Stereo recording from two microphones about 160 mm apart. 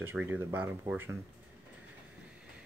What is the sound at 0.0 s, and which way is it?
Speech, 10° right (ahead or behind).